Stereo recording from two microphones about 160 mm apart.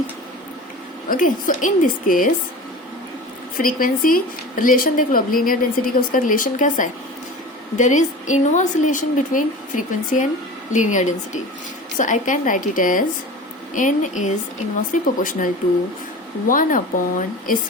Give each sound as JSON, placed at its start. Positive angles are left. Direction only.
{"t": 1.1, "sound": "speech", "side_deg": 55}
{"t": 3.6, "sound": "a woman's voice", "side_deg": 60}
{"t": 16.5, "sound": "speech", "side_deg": 55}